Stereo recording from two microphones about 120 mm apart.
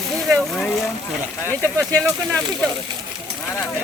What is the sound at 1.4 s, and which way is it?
Speech, 20° right (ahead or behind).